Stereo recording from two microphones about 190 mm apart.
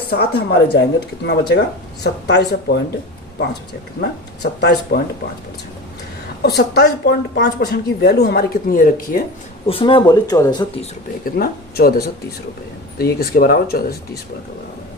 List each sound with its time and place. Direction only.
0.1 s a woman's voice: 55° left (ahead or behind)
4.6 s a woman's voice: 60° left (ahead or behind)
6.4 s a woman's voice: 60° left (ahead or behind)
9.6 s speech: 30° left (ahead or behind)
11.3 s speech: 50° left (ahead or behind)